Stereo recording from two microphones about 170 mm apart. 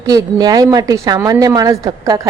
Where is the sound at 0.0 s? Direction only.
20° right (ahead or behind).